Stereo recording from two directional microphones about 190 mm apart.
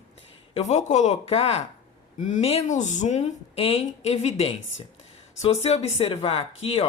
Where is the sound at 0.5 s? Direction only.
40° left (ahead or behind).